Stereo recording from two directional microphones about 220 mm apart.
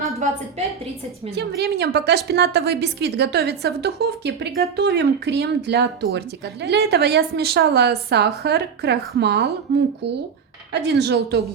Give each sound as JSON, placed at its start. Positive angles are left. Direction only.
{"t": 1.4, "sound": "a woman's voice", "side_deg": -45}
{"t": 10.7, "sound": "a woman's voice", "side_deg": -50}